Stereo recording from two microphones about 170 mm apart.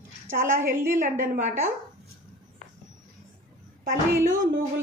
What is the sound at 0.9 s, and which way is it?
Speech, 50° right (ahead or behind).